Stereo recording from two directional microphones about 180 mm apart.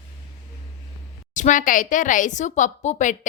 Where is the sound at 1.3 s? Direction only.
45° left (ahead or behind).